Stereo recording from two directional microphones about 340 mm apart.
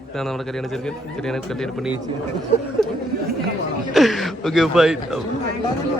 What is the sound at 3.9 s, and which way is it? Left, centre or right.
A man's voice, centre.